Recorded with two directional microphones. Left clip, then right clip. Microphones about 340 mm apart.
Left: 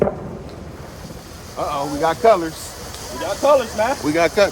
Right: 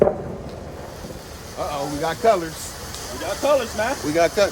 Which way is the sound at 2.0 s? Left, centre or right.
Left.